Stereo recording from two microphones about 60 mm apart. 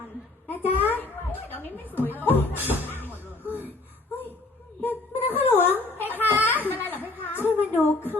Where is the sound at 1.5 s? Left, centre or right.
Left.